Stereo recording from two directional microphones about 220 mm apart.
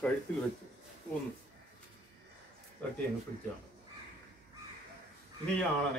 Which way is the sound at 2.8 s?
5° left (ahead or behind).